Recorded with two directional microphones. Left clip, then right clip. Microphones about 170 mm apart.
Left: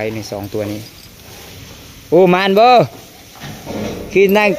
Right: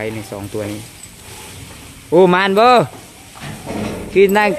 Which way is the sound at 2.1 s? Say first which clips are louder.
Left 1 dB; 15° left (ahead or behind).